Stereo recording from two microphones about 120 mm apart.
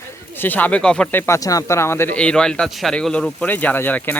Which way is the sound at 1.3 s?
30° left (ahead or behind).